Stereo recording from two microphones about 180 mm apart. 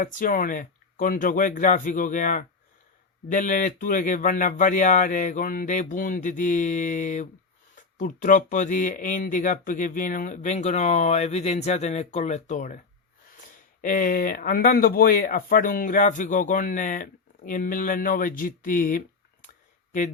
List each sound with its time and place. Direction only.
0.0 s speech: 45° left (ahead or behind)
13.8 s speech: 50° left (ahead or behind)